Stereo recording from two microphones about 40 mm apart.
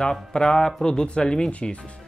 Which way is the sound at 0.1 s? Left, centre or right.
Centre.